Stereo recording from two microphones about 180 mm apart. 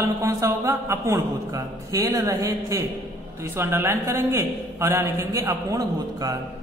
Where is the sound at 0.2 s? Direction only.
15° right (ahead or behind).